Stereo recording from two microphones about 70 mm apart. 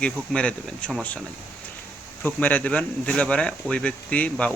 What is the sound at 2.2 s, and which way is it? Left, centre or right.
Speech, left.